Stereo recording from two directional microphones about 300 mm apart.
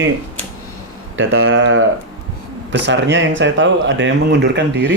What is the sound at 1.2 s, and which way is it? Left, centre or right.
Speech, right.